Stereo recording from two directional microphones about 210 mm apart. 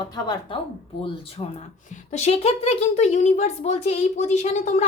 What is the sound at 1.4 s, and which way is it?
A woman's voice, 25° left (ahead or behind).